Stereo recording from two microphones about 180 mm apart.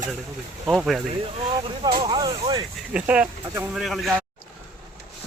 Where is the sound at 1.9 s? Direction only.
30° right (ahead or behind).